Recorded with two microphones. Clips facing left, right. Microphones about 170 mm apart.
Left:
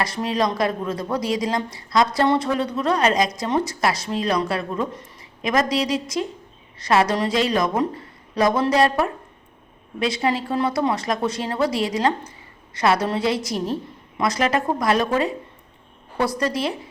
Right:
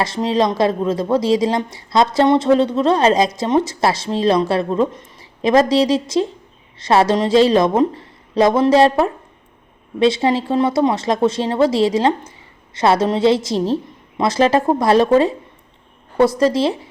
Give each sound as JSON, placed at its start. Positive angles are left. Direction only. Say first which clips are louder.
{"t": 0.0, "sound": "a woman's voice", "louder": "right 5 dB", "side_deg": -25}